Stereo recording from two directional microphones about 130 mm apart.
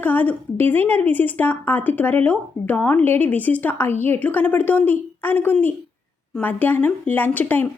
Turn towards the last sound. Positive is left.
turn(degrees=15)  # may be behind; listen again after turning